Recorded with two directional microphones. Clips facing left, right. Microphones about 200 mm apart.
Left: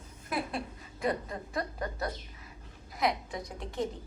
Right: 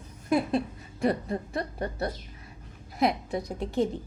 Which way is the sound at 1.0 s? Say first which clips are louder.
Right 6 dB; 30° right (ahead or behind).